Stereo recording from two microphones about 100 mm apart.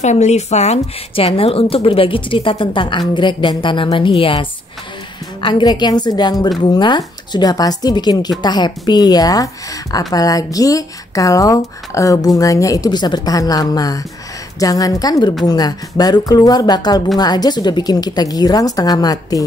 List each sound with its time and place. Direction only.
0.3 s speech: 90° left
1.1 s a woman's voice: 70° left (ahead or behind)
5.4 s a woman's voice: 50° left (ahead or behind)